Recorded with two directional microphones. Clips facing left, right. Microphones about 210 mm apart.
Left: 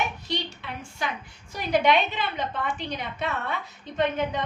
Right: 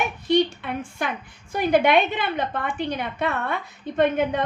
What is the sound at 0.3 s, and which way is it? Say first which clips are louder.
A woman's voice: right 12 dB; 55° right (ahead or behind).